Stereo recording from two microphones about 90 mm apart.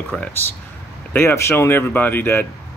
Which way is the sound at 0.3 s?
20° left (ahead or behind).